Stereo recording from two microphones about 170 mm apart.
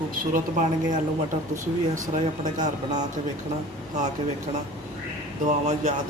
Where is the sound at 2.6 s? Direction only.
25° right (ahead or behind).